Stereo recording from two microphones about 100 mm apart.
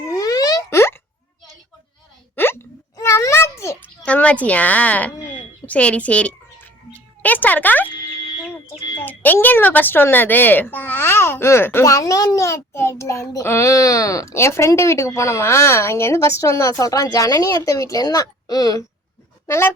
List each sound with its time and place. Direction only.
0.1 s plop: 40° left (ahead or behind)
0.7 s plop: 25° left (ahead or behind)
2.3 s hiccup: 20° left (ahead or behind)
3.0 s a sound: 30° left (ahead or behind)
3.8 s speech: 15° left (ahead or behind)
5.6 s a sound: 10° left (ahead or behind)
9.0 s speech: 15° left (ahead or behind); by 18.8 s 40° left (ahead or behind)
19.5 s speech: 25° left (ahead or behind)